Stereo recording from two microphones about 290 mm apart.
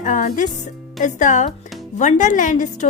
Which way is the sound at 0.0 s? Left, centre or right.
Left.